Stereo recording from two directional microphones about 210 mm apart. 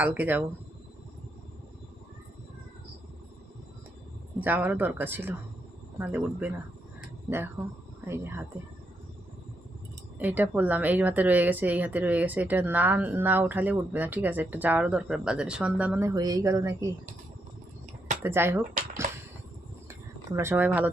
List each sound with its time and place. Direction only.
0.0 s speech: 10° right (ahead or behind)
4.4 s speech: 10° right (ahead or behind)
10.2 s speech: 10° right (ahead or behind)
18.2 s speech: 10° right (ahead or behind)